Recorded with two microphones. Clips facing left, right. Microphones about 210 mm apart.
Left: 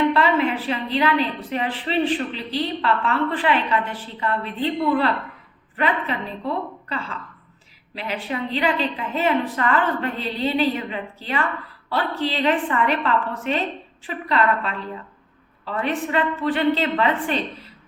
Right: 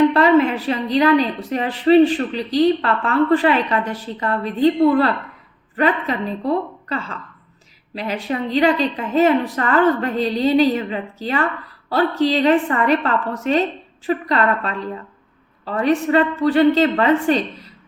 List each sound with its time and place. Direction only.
0.1 s a woman's voice: 40° right (ahead or behind)